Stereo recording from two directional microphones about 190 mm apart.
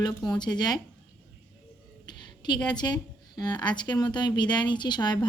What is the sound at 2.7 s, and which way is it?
A woman's voice, 20° left (ahead or behind).